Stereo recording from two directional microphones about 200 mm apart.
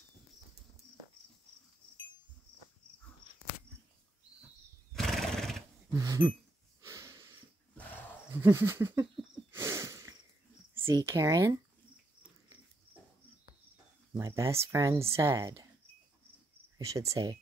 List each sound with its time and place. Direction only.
4.9 s horse: centre (ahead or behind)
5.9 s speech: 15° right (ahead or behind)
6.8 s wheeze: 15° right (ahead or behind)
8.3 s speech: 10° right (ahead or behind)
9.5 s a sound: 15° right (ahead or behind)
11.0 s speech: 15° right (ahead or behind)
14.1 s speech: 15° right (ahead or behind)
16.7 s speech: 15° right (ahead or behind)